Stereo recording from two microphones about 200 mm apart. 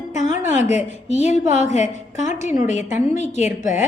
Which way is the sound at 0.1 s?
35° left (ahead or behind).